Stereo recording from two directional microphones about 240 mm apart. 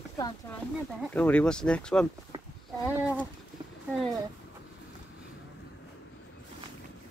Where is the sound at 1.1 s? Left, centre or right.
Centre.